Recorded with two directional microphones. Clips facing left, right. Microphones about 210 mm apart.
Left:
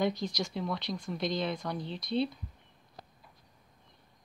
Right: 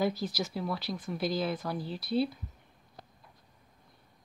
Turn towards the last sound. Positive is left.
turn(degrees=-5)  # may be behind; listen again after turning